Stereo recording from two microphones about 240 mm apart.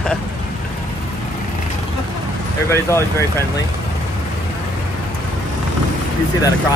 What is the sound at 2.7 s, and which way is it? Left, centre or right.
Speech, centre.